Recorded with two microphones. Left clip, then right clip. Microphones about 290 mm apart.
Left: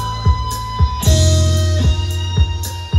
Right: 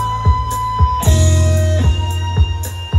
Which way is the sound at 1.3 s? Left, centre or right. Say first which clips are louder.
Right 1 dB; centre.